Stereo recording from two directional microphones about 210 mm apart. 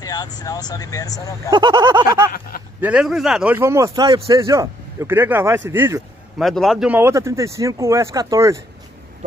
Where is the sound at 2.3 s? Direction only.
45° left (ahead or behind).